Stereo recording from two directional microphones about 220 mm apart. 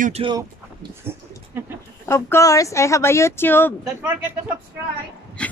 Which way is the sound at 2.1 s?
10° left (ahead or behind).